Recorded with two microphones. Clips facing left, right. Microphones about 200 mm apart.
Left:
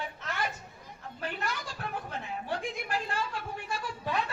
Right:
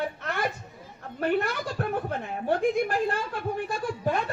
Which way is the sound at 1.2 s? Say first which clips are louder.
Right 11 dB; 55° right (ahead or behind).